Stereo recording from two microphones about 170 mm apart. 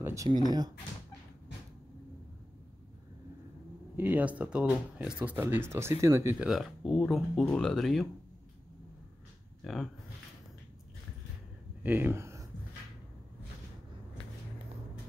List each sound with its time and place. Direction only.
0.0 s speech: 20° right (ahead or behind)
3.9 s speech: 10° right (ahead or behind)
6.4 s speech: centre (ahead or behind)
9.6 s speech: centre (ahead or behind)
11.8 s speech: 10° right (ahead or behind)